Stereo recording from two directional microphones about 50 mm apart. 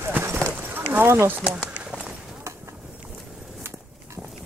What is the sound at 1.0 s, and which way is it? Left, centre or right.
Speech, right.